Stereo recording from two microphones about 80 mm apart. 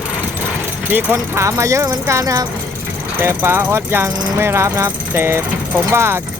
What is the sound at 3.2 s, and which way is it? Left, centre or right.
Speech, right.